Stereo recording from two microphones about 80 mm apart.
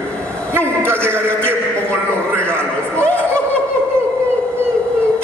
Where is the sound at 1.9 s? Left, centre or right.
Centre.